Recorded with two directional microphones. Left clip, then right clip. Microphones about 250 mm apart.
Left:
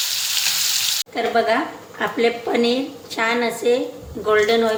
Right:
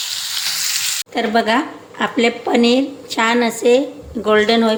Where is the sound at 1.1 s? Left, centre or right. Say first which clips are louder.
Right 3 dB; right.